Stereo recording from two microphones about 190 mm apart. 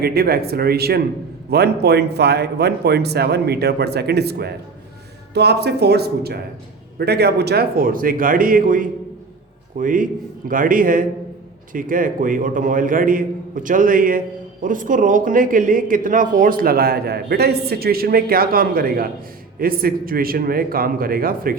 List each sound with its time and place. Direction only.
0.0 s a man's voice: 55° right (ahead or behind)